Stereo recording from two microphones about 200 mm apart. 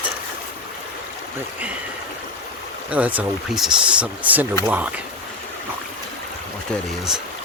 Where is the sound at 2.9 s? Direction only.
5° right (ahead or behind).